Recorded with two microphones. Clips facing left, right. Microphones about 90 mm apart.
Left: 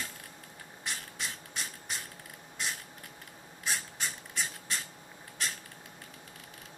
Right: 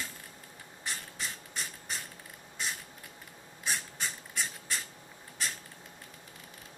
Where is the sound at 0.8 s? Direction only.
Centre (ahead or behind).